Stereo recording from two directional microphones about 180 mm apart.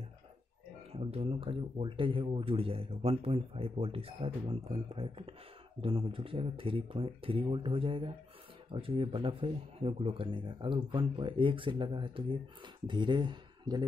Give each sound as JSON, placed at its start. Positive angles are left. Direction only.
{"t": 0.9, "sound": "speech", "side_deg": -35}